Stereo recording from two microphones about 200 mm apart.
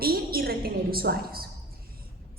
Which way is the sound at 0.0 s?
50° right (ahead or behind).